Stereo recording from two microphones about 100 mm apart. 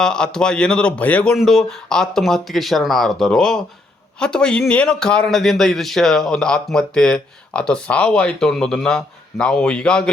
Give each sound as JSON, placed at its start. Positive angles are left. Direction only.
{"t": 0.0, "sound": "a man's voice", "side_deg": 5}